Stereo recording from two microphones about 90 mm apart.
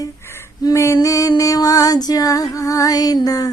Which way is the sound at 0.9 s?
40° left (ahead or behind).